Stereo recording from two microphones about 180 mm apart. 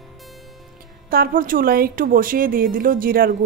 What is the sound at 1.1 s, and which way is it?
A woman's voice, 55° right (ahead or behind).